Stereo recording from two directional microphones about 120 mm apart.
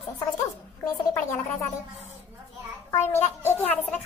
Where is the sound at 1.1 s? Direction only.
15° left (ahead or behind).